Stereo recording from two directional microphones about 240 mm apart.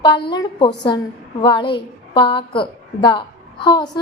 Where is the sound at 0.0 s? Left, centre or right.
Centre.